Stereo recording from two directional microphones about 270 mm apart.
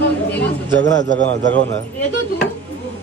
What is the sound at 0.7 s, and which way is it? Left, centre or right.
Speech, right.